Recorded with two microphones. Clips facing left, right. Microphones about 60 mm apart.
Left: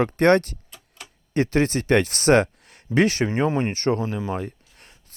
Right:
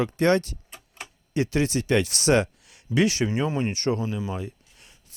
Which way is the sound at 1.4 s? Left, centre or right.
Left.